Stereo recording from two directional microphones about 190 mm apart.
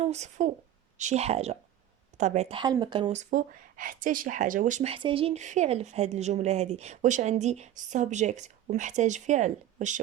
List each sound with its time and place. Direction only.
0.0 s speech: 35° right (ahead or behind)
3.2 s speech: 40° right (ahead or behind)